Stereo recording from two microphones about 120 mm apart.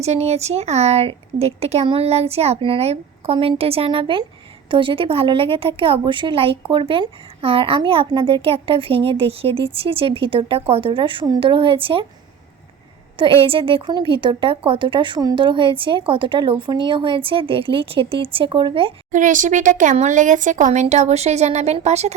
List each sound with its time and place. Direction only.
0.0 s a woman's voice: 65° right (ahead or behind); by 12.0 s 45° right (ahead or behind)
13.4 s a woman's voice: 50° right (ahead or behind)
19.1 s speech: 90° right
20.9 s speech: 65° right (ahead or behind)